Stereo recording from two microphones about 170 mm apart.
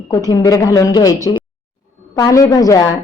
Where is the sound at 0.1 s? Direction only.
20° left (ahead or behind).